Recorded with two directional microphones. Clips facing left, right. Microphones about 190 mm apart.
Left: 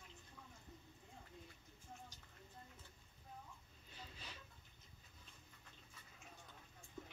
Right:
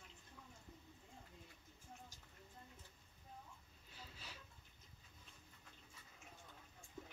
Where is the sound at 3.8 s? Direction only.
5° right (ahead or behind).